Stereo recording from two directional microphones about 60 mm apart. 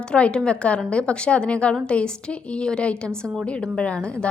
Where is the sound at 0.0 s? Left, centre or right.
Centre.